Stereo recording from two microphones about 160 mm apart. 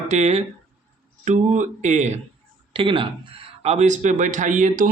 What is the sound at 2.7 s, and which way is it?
Speech, 35° right (ahead or behind).